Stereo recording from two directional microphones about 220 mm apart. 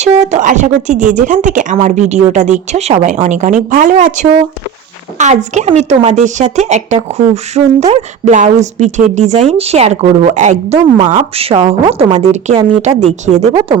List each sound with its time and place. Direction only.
0.0 s speech: 35° right (ahead or behind)